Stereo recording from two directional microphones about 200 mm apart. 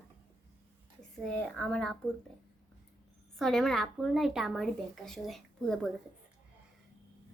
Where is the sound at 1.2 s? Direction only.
5° left (ahead or behind).